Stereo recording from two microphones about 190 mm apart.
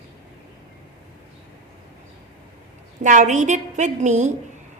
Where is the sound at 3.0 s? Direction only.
40° right (ahead or behind).